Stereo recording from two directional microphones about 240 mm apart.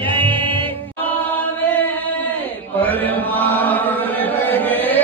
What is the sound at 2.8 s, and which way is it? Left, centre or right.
Chant, centre.